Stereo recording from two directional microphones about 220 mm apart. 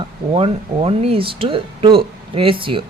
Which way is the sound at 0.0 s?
25° right (ahead or behind).